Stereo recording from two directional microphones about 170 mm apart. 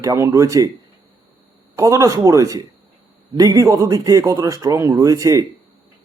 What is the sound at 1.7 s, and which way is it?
Speech, 20° right (ahead or behind).